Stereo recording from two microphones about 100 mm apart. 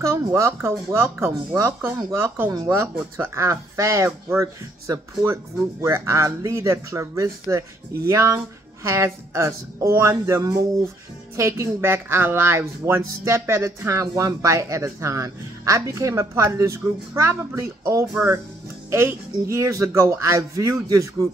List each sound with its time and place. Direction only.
0.0 s speech: 30° right (ahead or behind)